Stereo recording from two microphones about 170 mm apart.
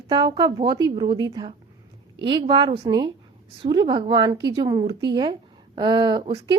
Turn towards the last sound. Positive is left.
turn(degrees=-30)  # may be behind; listen again after turning